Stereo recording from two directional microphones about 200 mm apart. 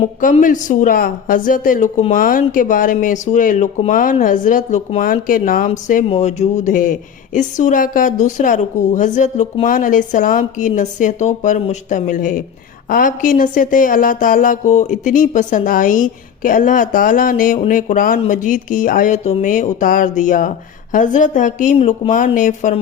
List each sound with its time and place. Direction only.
0.2 s a woman's voice: 40° left (ahead or behind)